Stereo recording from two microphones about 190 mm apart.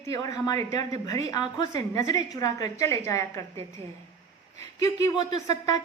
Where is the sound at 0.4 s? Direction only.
20° left (ahead or behind).